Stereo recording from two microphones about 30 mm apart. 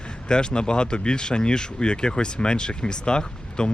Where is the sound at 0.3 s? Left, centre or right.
Left.